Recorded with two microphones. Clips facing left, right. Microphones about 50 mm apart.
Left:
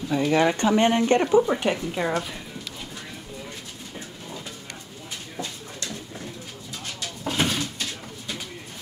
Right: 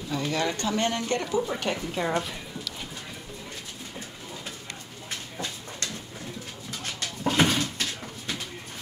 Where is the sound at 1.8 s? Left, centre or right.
Centre.